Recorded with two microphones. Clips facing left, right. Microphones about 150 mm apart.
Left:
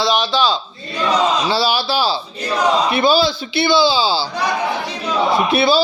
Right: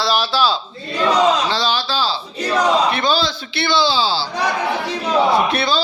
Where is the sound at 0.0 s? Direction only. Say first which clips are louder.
Left 1 dB; 5° right (ahead or behind).